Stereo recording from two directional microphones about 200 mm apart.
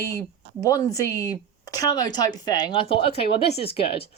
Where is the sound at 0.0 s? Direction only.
15° left (ahead or behind).